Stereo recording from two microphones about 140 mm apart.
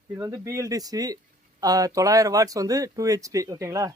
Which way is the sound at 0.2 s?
20° right (ahead or behind).